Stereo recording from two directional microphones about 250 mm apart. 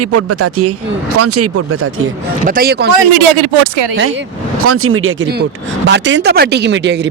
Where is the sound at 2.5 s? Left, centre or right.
Right.